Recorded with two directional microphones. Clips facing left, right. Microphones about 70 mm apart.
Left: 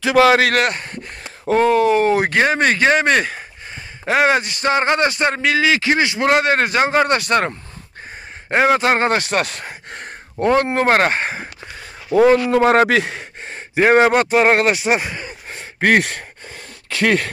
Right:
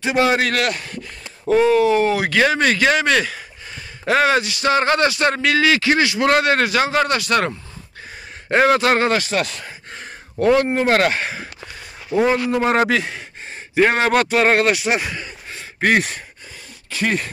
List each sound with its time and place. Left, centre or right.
0.0 s a man's voice: left
0.6 s speech: left
4.0 s speech: left
4.4 s speech: left
4.7 s a man's voice: left
8.5 s speech: centre
9.1 s a sound: left
10.4 s a man's voice: left
12.1 s a man's voice: left
12.5 s speech: left
13.9 s a man's voice: left
14.7 s speech: left
15.6 s a sound: left